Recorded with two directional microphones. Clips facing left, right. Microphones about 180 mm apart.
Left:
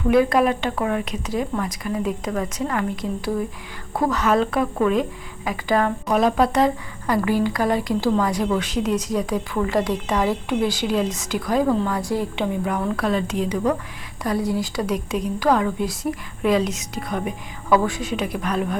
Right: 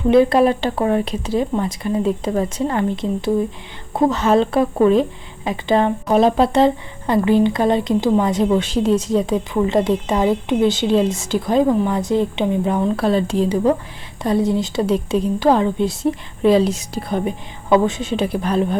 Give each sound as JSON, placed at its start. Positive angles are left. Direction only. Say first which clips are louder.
{"t": 0.1, "sound": "speech", "louder": "right 4 dB", "side_deg": -30}